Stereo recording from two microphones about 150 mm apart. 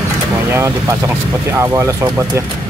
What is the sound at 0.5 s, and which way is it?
Speech, 20° right (ahead or behind).